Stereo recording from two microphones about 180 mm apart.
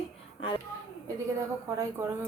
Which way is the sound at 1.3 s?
15° right (ahead or behind).